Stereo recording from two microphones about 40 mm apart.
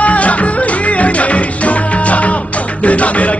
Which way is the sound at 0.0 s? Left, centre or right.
Left.